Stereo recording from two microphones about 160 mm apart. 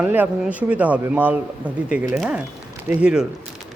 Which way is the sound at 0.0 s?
10° right (ahead or behind).